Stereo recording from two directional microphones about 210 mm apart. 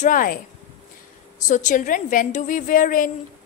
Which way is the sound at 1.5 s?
35° left (ahead or behind).